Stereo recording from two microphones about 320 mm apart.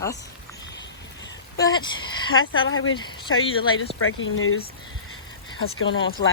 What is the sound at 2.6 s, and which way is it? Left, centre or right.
Speech, left.